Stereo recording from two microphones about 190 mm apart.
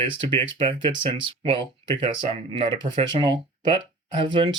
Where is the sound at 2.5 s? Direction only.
30° right (ahead or behind).